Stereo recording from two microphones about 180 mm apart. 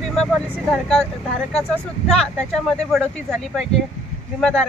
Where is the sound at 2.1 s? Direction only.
Centre (ahead or behind).